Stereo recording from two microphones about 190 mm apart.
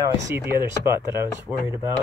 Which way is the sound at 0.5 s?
15° right (ahead or behind).